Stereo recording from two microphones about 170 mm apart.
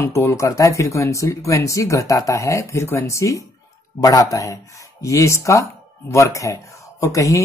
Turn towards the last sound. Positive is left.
turn(degrees=20)  # may be behind; listen again after turning